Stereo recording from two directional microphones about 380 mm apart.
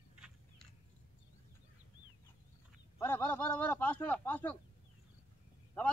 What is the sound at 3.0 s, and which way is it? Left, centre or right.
Speech, centre.